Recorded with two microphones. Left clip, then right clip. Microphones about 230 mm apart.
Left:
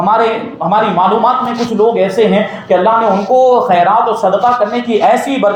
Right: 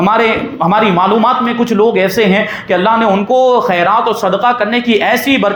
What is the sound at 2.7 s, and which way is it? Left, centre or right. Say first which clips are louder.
Speech: left 1 dB; right.